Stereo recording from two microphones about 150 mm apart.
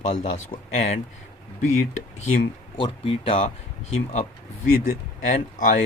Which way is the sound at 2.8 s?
40° left (ahead or behind).